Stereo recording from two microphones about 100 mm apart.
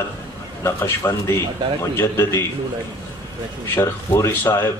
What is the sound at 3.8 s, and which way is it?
Speech, 30° left (ahead or behind).